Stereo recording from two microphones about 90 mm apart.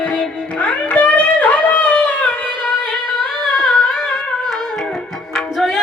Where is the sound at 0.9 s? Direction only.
15° left (ahead or behind).